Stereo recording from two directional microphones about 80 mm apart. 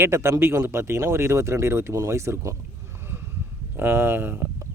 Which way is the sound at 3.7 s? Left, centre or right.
Right.